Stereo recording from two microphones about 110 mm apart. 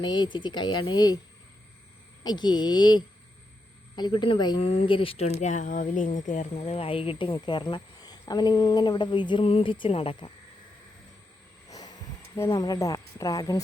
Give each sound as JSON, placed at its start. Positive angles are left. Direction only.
{"t": 0.0, "sound": "speech", "side_deg": 45}
{"t": 2.2, "sound": "speech", "side_deg": 40}
{"t": 4.6, "sound": "speech", "side_deg": 60}
{"t": 6.4, "sound": "speech", "side_deg": 80}
{"t": 11.7, "sound": "a sound", "side_deg": 35}
{"t": 12.4, "sound": "speech", "side_deg": 35}